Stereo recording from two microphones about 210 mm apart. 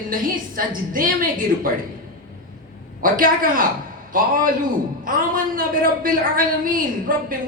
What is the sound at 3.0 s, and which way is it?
A woman's voice, 40° right (ahead or behind).